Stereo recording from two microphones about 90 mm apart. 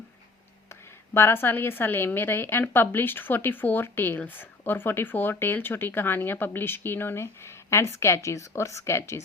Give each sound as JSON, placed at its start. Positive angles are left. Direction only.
{"t": 0.7, "sound": "speech", "side_deg": 25}